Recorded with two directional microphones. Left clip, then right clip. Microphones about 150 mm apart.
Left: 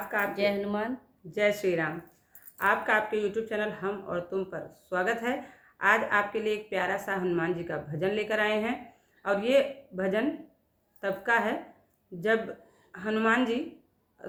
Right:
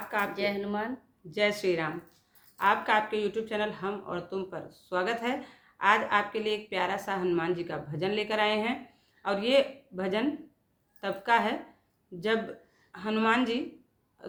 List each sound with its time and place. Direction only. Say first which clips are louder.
0.3 s speech: left 3 dB; 5° left (ahead or behind)
1.3 s a woman's voice: left 1 dB; 25° right (ahead or behind)
12.9 s a woman's voice: left 1 dB; 25° right (ahead or behind)